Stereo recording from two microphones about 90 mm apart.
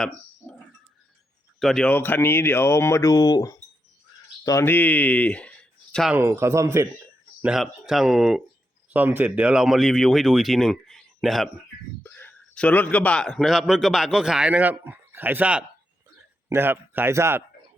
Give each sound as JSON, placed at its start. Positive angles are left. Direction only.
{"t": 1.5, "sound": "speech", "side_deg": 5}
{"t": 1.9, "sound": "speech", "side_deg": 25}
{"t": 4.6, "sound": "speech", "side_deg": 20}
{"t": 6.1, "sound": "speech", "side_deg": -30}
{"t": 7.6, "sound": "speech", "side_deg": -5}
{"t": 8.9, "sound": "speech", "side_deg": -20}
{"t": 12.0, "sound": "a sound", "side_deg": 20}
{"t": 12.5, "sound": "a man's voice", "side_deg": 15}
{"t": 13.2, "sound": "a man's voice", "side_deg": 0}